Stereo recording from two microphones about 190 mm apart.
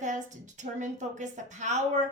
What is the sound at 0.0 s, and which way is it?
A woman's voice, 40° right (ahead or behind).